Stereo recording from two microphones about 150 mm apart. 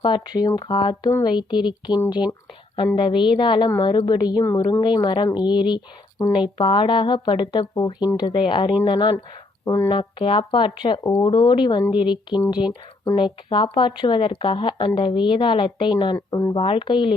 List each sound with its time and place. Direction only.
0.0 s speech: 30° left (ahead or behind)
9.6 s speech: 15° left (ahead or behind)
9.9 s speech: 35° left (ahead or behind)
16.1 s speech: 15° left (ahead or behind)
16.6 s speech: 35° left (ahead or behind)